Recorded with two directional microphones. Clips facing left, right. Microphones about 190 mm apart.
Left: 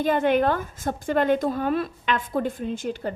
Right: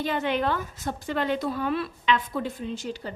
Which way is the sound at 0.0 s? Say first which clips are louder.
Left 6 dB; 50° left (ahead or behind).